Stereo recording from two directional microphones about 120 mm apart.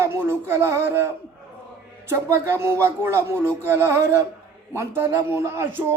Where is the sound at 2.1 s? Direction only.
20° right (ahead or behind).